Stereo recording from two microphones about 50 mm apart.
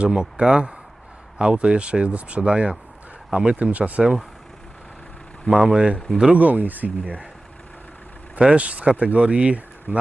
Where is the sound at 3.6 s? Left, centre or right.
Right.